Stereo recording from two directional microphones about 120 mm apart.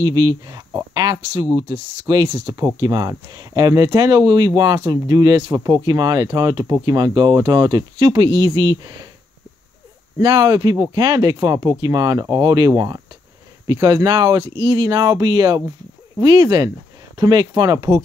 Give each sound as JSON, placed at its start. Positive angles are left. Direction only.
{"t": 0.0, "sound": "speech", "side_deg": -35}
{"t": 10.2, "sound": "speech", "side_deg": -35}